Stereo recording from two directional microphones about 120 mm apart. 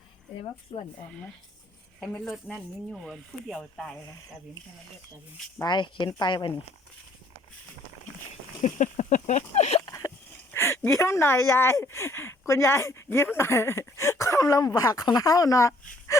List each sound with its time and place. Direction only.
0.7 s speech: 45° left (ahead or behind)
2.0 s speech: centre (ahead or behind)
5.6 s speech: 40° left (ahead or behind)
8.6 s a sound: 90° left; by 9.8 s 65° left (ahead or behind)
9.8 s a sound: 25° left (ahead or behind)
10.5 s speech: 20° left (ahead or behind)